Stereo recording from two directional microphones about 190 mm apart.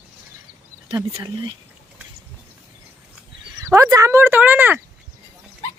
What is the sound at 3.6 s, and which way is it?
Speech, 15° right (ahead or behind).